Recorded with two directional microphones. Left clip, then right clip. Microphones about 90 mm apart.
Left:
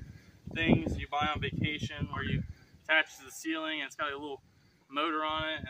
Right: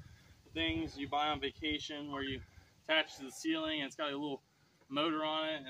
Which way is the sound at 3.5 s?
35° right (ahead or behind).